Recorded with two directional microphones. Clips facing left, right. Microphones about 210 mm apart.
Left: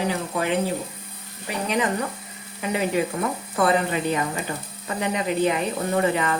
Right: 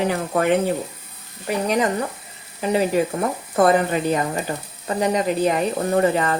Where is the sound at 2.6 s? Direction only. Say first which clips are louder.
Right 4 dB; 35° right (ahead or behind).